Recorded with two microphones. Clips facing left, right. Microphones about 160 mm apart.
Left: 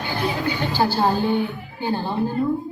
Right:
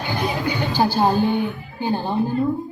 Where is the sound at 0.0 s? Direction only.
15° right (ahead or behind).